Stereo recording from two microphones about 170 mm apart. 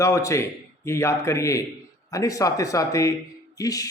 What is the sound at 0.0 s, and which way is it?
A man's voice, 20° left (ahead or behind).